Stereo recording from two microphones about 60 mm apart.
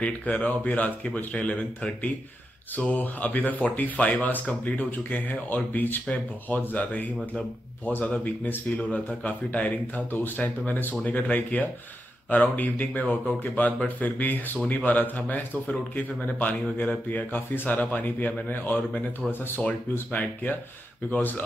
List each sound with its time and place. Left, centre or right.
0.0 s speech: left
20.1 s speech: left